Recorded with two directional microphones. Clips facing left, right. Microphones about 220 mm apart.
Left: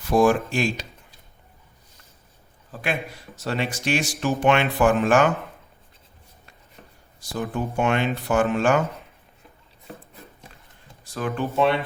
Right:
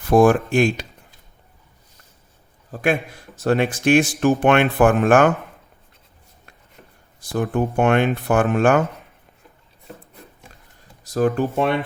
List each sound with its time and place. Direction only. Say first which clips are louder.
0.0 s speech: right 4 dB; 55° right (ahead or behind)
2.7 s speech: right 7 dB; 50° right (ahead or behind)
7.2 s speech: right 6 dB; 55° right (ahead or behind)
11.1 s speech: right 8 dB; 45° right (ahead or behind)